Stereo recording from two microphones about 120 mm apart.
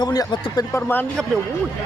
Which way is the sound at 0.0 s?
35° left (ahead or behind).